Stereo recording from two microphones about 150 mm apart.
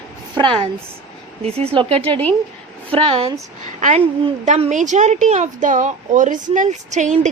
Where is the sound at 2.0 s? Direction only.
10° left (ahead or behind).